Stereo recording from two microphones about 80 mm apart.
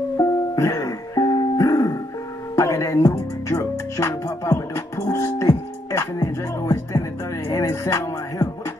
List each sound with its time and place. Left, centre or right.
0.2 s music: left